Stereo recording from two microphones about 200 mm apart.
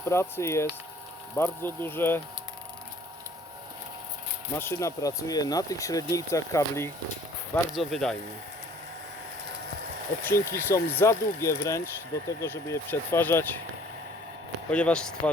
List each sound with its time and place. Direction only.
0.0 s speech: 10° left (ahead or behind)
4.5 s speech: 10° left (ahead or behind)
7.7 s speech: centre (ahead or behind)
10.2 s speech: 15° left (ahead or behind)
14.7 s speech: 5° left (ahead or behind)